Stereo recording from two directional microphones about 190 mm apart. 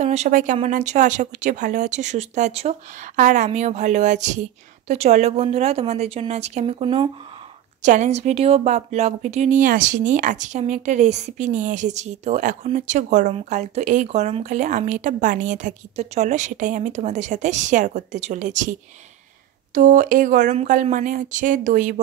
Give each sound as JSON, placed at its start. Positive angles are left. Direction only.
{"t": 0.0, "sound": "a woman's voice", "side_deg": -35}
{"t": 7.8, "sound": "a woman's voice", "side_deg": -40}